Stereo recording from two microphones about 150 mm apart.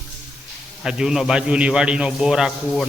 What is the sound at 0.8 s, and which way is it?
A man's voice, 5° right (ahead or behind).